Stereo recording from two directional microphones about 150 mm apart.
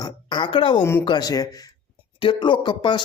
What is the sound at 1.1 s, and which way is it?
Speech, 25° left (ahead or behind).